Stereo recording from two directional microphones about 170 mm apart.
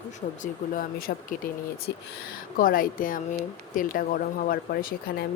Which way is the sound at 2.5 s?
55° left (ahead or behind).